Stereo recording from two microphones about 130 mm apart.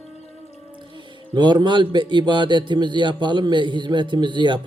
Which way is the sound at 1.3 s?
35° right (ahead or behind).